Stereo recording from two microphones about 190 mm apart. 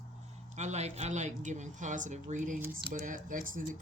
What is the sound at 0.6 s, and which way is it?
Speech, 35° right (ahead or behind).